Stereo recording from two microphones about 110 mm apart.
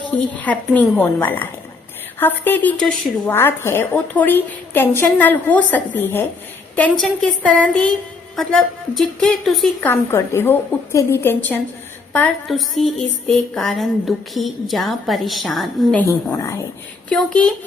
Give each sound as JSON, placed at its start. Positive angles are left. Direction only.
{"t": 0.3, "sound": "a woman's voice", "side_deg": 15}
{"t": 9.8, "sound": "a woman's voice", "side_deg": 20}
{"t": 12.5, "sound": "a woman's voice", "side_deg": 0}
{"t": 16.0, "sound": "a woman's voice", "side_deg": 30}
{"t": 17.1, "sound": "a woman's voice", "side_deg": 5}